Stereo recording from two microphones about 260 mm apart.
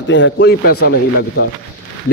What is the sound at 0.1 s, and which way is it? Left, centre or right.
Speech, left.